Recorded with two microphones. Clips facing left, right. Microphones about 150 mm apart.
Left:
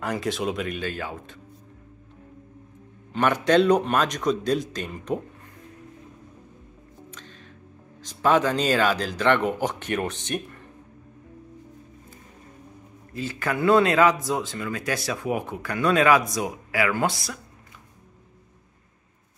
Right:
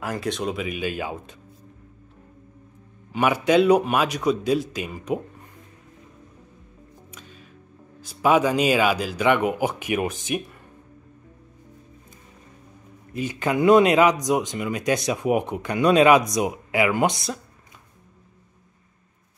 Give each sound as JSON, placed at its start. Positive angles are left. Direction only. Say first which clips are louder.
{"t": 0.0, "sound": "speech", "louder": "even", "side_deg": 0}
{"t": 0.8, "sound": "speech", "louder": "right 3 dB", "side_deg": -15}
{"t": 3.1, "sound": "speech", "louder": "right 1 dB", "side_deg": -10}
{"t": 7.1, "sound": "music", "louder": "even", "side_deg": -10}
{"t": 8.0, "sound": "speech", "louder": "right 2 dB", "side_deg": -10}
{"t": 13.1, "sound": "speech", "louder": "right 4 dB", "side_deg": -15}